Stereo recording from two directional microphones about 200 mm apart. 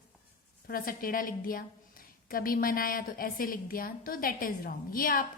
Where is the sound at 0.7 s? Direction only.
45° left (ahead or behind).